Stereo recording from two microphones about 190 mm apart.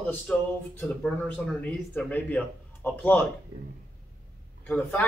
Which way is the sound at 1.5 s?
10° left (ahead or behind).